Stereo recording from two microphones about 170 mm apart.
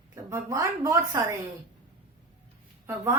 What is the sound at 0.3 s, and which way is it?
A woman's voice, 15° right (ahead or behind).